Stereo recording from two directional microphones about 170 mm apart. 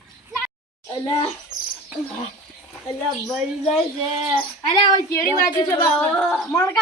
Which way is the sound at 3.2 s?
Centre (ahead or behind).